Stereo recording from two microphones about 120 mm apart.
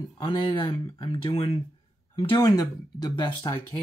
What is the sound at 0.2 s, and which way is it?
Speech, 40° left (ahead or behind).